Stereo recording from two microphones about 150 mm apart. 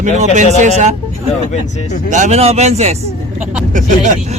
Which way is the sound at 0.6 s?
50° right (ahead or behind).